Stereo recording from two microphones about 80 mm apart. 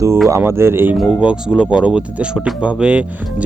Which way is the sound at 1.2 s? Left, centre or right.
Centre.